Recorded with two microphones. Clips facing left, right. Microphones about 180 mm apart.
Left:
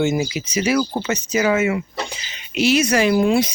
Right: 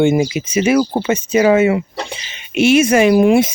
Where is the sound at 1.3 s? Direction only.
30° right (ahead or behind).